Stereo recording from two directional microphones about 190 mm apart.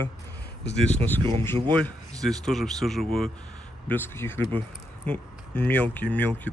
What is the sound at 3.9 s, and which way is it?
Speech, 10° left (ahead or behind).